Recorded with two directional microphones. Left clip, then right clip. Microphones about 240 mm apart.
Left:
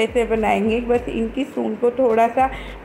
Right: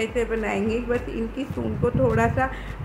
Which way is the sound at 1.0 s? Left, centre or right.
Centre.